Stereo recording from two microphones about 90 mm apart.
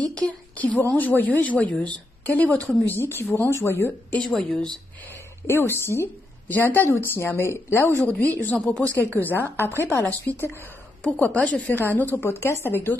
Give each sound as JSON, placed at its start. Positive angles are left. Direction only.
{"t": 0.0, "sound": "a woman's voice", "side_deg": 15}
{"t": 4.4, "sound": "a woman's voice", "side_deg": 10}
{"t": 5.5, "sound": "a woman's voice", "side_deg": 25}
{"t": 8.0, "sound": "a woman's voice", "side_deg": 15}
{"t": 9.2, "sound": "a woman's voice", "side_deg": 25}